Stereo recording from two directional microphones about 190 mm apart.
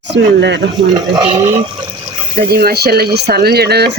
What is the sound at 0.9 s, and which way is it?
Speech, 25° right (ahead or behind).